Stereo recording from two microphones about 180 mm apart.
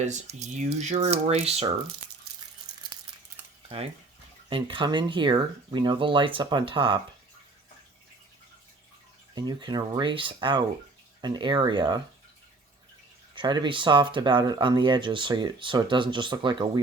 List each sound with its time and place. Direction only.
0.0 s speech: 40° right (ahead or behind)
3.4 s cutlery: 10° right (ahead or behind)
4.4 s speech: 30° right (ahead or behind)
9.3 s speech: 25° right (ahead or behind)
13.3 s speech: 25° right (ahead or behind)